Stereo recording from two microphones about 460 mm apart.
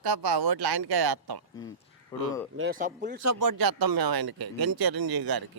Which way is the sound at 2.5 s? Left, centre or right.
Centre.